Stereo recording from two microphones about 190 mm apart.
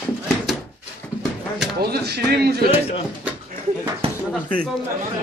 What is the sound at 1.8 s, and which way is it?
Speech, 55° right (ahead or behind).